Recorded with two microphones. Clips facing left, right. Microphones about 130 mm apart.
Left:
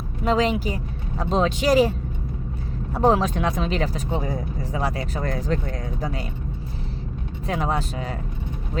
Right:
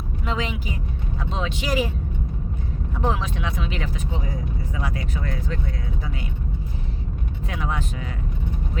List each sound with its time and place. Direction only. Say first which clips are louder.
0.3 s speech: left 8 dB; 40° left (ahead or behind)
2.9 s speech: left 7 dB; 40° left (ahead or behind)
7.4 s speech: left 5 dB; 35° left (ahead or behind)